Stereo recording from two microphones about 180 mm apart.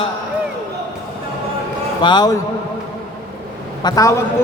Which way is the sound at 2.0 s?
25° left (ahead or behind).